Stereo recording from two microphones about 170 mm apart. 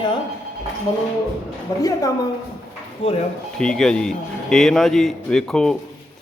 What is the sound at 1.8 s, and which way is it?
Speech, 20° left (ahead or behind).